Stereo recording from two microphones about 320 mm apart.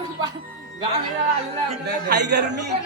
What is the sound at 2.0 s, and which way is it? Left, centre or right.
Speech, right.